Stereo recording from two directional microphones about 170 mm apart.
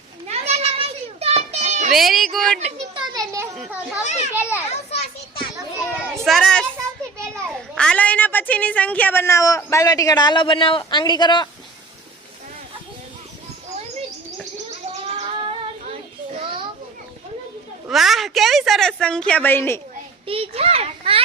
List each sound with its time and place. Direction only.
0.3 s children playing: 40° right (ahead or behind)
1.9 s speech: centre (ahead or behind)
2.6 s children playing: 40° right (ahead or behind)
3.5 s children playing: 5° right (ahead or behind)
4.0 s a child's voice: 45° left (ahead or behind)
4.4 s a child's voice: 10° right (ahead or behind)
4.9 s children playing: 35° left (ahead or behind)
6.1 s a child's voice: centre (ahead or behind); by 11.4 s 25° left (ahead or behind)
15.0 s child singing: 35° right (ahead or behind)
17.8 s a sound: centre (ahead or behind)
20.2 s a sound: 35° right (ahead or behind)